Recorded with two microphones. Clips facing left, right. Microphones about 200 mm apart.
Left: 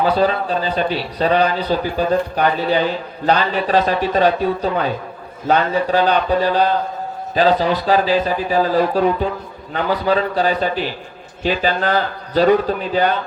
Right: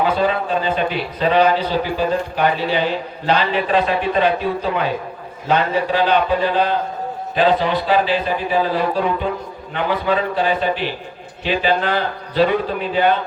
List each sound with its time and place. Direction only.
0.0 s a man's voice: 35° left (ahead or behind)